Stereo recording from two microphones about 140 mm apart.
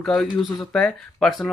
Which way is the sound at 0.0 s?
5° left (ahead or behind).